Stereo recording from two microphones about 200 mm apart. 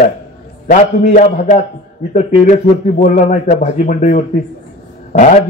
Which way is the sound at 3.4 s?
40° left (ahead or behind).